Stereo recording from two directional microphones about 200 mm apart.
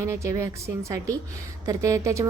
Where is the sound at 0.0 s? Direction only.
15° right (ahead or behind).